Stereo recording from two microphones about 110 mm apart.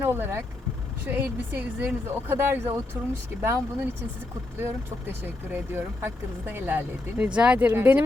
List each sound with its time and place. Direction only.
0.0 s speech: 20° right (ahead or behind)
7.7 s speech: 20° right (ahead or behind)